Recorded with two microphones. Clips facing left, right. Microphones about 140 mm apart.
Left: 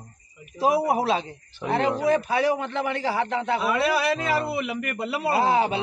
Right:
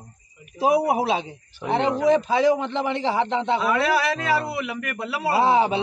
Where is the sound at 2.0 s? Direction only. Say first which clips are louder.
Right 3 dB; 20° right (ahead or behind).